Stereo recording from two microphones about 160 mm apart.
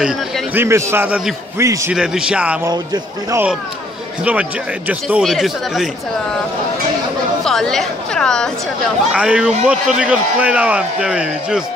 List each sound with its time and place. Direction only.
0.0 s a man's voice: 5° right (ahead or behind)
0.7 s a man's voice: 15° right (ahead or behind)
1.6 s speech: 20° right (ahead or behind)
2.0 s a man's voice: 5° right (ahead or behind)
2.7 s speech: 25° right (ahead or behind)
4.2 s a man's voice: 10° right (ahead or behind)
7.4 s a woman's voice: 5° left (ahead or behind)